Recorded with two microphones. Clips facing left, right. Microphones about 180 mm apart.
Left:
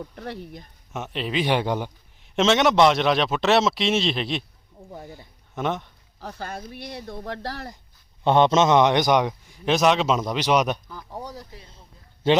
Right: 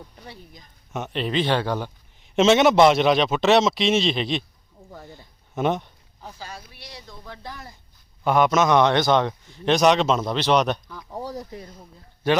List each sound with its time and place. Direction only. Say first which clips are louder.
0.0 s speech: left 8 dB; 70° left (ahead or behind)
0.9 s a man's voice: right 2 dB; centre (ahead or behind); by 1.9 s 15° left (ahead or behind)
2.3 s a man's voice: right 3 dB; 5° right (ahead or behind)
5.5 s speech: right 3 dB; 10° right (ahead or behind)
6.1 s speech: left 5 dB; 70° left (ahead or behind)
8.2 s a man's voice: left 1 dB; 30° left (ahead or behind); by 11.3 s centre (ahead or behind)
12.2 s a man's voice: left 2 dB; 25° left (ahead or behind)